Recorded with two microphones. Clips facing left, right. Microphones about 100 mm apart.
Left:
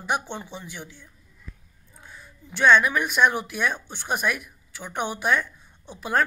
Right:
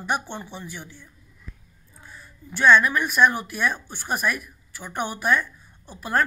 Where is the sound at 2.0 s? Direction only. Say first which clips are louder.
Right 2 dB; 15° left (ahead or behind).